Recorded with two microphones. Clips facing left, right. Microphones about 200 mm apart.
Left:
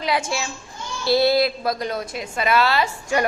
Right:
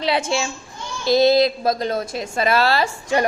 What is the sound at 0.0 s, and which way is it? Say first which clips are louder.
A child's voice: right 3 dB; 30° right (ahead or behind).